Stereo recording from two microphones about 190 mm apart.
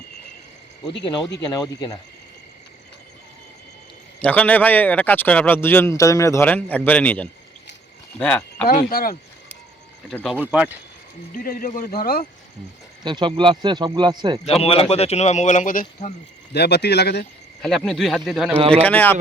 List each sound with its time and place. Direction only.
1.0 s speech: 25° left (ahead or behind)
4.2 s speech: 10° left (ahead or behind)
8.6 s speech: 50° left (ahead or behind)
10.1 s speech: centre (ahead or behind)
11.4 s speech: 50° left (ahead or behind)
13.0 s speech: 25° right (ahead or behind)
14.6 s speech: 30° left (ahead or behind)
16.5 s speech: 60° left (ahead or behind)
17.6 s speech: centre (ahead or behind)